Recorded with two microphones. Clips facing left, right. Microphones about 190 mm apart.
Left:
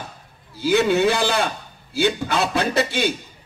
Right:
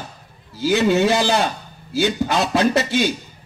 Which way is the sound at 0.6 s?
60° left (ahead or behind).